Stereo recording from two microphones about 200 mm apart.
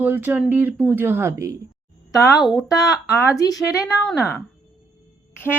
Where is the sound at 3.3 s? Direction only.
15° left (ahead or behind).